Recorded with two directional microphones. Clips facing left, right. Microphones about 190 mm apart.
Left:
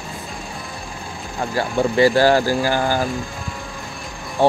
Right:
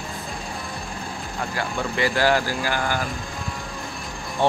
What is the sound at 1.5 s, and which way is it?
Speech, 30° left (ahead or behind).